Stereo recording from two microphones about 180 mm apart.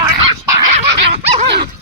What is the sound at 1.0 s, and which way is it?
Dog, 35° right (ahead or behind).